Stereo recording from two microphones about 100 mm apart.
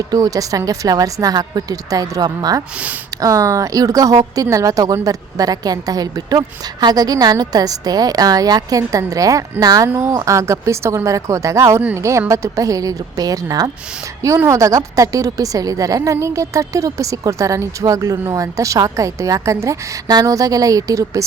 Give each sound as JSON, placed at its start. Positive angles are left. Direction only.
{"t": 0.1, "sound": "a woman's voice", "side_deg": -35}